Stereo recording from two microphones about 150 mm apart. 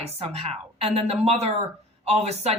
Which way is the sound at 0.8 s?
45° right (ahead or behind).